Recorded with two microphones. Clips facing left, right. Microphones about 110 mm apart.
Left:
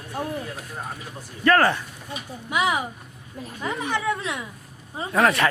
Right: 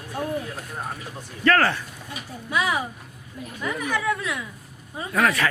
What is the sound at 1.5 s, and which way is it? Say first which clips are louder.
Speech: left 2 dB; 15° left (ahead or behind).